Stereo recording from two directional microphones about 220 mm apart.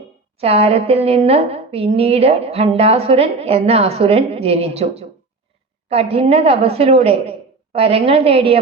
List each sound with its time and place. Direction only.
0.3 s a woman's voice: 25° right (ahead or behind)